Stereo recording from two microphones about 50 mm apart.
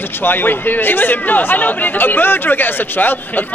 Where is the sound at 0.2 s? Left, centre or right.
Left.